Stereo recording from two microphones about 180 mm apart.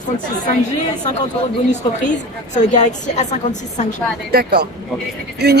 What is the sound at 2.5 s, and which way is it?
Speech, 40° left (ahead or behind).